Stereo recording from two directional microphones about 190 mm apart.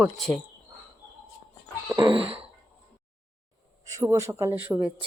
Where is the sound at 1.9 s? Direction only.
25° right (ahead or behind).